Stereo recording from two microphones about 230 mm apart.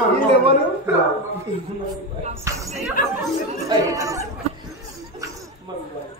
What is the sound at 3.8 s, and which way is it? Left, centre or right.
Speech, centre.